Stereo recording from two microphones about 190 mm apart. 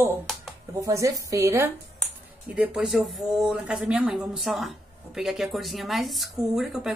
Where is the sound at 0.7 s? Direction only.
15° right (ahead or behind).